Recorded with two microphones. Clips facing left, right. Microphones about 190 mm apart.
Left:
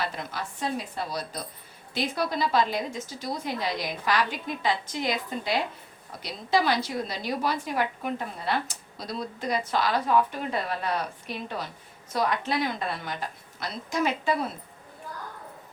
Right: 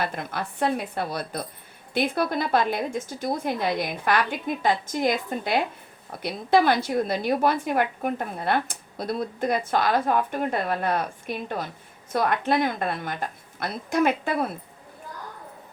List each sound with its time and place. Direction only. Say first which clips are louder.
0.0 s a woman's voice: right 3 dB; 55° right (ahead or behind)